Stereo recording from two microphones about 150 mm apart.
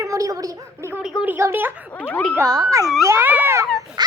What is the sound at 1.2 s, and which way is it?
Speech, 15° right (ahead or behind).